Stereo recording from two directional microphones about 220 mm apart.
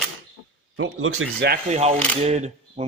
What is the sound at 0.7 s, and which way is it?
Speech, 65° right (ahead or behind).